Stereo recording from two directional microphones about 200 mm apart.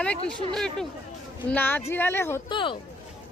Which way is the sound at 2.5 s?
25° left (ahead or behind).